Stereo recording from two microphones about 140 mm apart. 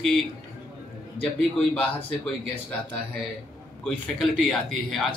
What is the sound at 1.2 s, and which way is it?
Speech, 10° left (ahead or behind).